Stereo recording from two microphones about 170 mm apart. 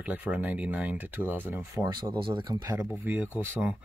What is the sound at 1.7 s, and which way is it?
Speech, 25° right (ahead or behind).